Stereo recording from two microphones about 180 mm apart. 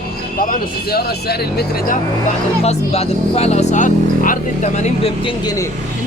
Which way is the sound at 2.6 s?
35° left (ahead or behind).